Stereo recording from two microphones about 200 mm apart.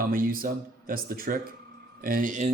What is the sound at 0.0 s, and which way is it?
Speech, 45° right (ahead or behind).